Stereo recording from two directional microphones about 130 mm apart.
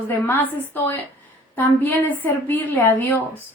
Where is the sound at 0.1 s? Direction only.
15° left (ahead or behind).